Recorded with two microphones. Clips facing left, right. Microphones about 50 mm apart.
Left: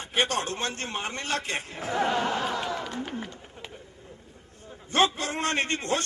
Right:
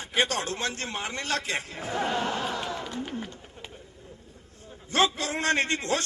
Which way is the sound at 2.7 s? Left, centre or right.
Left.